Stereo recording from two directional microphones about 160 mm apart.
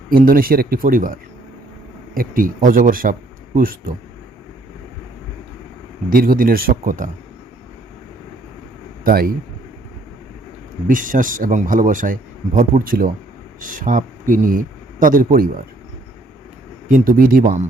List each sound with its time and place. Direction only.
0.1 s speech: 65° right (ahead or behind)
6.1 s speech: 65° right (ahead or behind)
9.0 s speech: 65° right (ahead or behind)
10.8 s speech: 55° right (ahead or behind)
16.9 s speech: 60° right (ahead or behind)